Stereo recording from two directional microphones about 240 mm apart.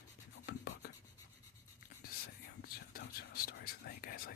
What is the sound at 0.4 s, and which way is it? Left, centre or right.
Writing, left.